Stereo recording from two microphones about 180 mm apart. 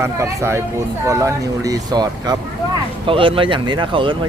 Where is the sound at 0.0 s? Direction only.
15° right (ahead or behind).